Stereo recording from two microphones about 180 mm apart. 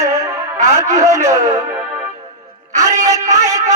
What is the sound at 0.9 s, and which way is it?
Music, 15° right (ahead or behind).